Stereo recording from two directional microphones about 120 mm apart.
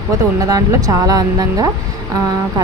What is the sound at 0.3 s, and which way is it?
Speech, 30° right (ahead or behind).